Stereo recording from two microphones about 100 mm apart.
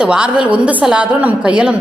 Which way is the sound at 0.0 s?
10° right (ahead or behind).